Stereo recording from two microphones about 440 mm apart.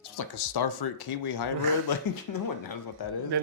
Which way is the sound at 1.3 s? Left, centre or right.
Left.